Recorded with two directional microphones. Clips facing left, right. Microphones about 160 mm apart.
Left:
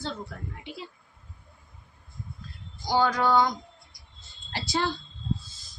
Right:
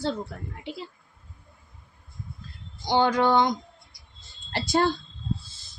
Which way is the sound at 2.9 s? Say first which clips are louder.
Right 2 dB; 25° right (ahead or behind).